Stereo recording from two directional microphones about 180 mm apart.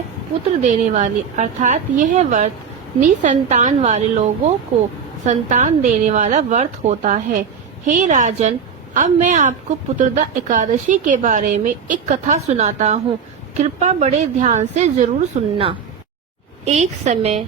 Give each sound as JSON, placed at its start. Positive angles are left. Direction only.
{"t": 0.6, "sound": "a woman's voice", "side_deg": -45}
{"t": 16.6, "sound": "speech", "side_deg": -40}